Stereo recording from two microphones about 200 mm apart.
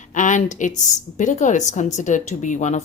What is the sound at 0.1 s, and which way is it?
A woman's voice, 40° left (ahead or behind).